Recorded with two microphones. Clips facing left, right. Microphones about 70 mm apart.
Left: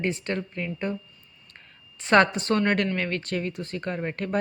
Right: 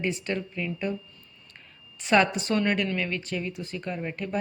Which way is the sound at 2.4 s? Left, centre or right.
Left.